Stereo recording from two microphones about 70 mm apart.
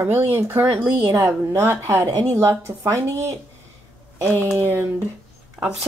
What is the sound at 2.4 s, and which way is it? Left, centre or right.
Speech, right.